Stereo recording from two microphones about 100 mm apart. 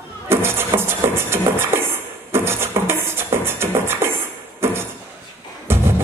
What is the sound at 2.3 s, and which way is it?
Beatboxing, 25° right (ahead or behind).